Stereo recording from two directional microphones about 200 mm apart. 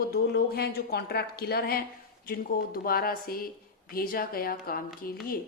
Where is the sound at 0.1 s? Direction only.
50° left (ahead or behind).